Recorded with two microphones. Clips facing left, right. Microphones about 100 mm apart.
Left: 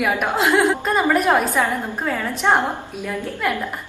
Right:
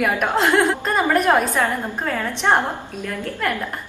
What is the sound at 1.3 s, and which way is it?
A woman's voice, 15° left (ahead or behind).